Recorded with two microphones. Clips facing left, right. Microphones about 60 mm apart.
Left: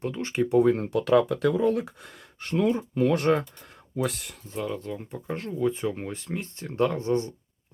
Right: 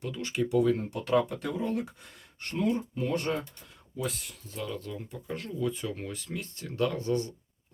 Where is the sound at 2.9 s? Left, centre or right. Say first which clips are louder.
Left 8 dB; left.